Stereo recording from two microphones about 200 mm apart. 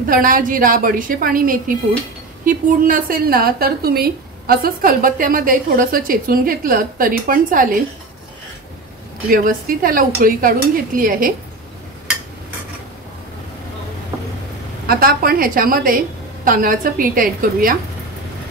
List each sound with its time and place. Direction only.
0.0 s a woman's voice: 45° right (ahead or behind)
9.3 s a woman's voice: 45° right (ahead or behind)
14.9 s a woman's voice: 45° right (ahead or behind)